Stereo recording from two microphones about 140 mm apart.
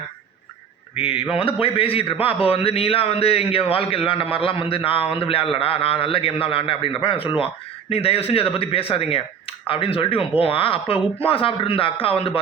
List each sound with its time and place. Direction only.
0.9 s a man's voice: 40° left (ahead or behind)